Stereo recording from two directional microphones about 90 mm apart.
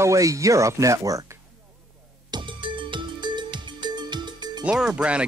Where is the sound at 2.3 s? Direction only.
60° right (ahead or behind).